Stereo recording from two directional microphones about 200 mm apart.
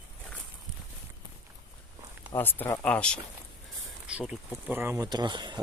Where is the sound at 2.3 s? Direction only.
10° left (ahead or behind); by 5.0 s 10° right (ahead or behind).